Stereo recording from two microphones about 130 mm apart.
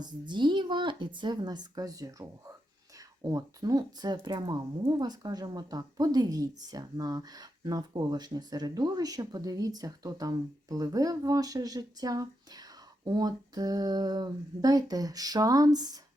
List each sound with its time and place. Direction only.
0.0 s speech: 35° right (ahead or behind)